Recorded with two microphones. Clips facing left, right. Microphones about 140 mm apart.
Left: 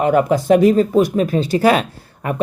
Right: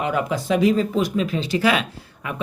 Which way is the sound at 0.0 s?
50° left (ahead or behind).